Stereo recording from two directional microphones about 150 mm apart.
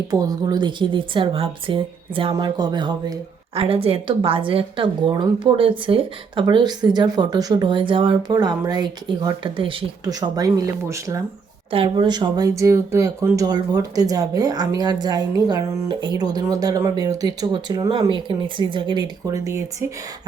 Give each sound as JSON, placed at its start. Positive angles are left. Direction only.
{"t": 0.1, "sound": "a woman's voice", "side_deg": -25}
{"t": 11.7, "sound": "a woman's voice", "side_deg": -35}